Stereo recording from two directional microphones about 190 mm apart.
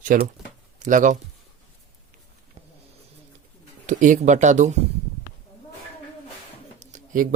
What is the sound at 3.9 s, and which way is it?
Speech, 40° right (ahead or behind).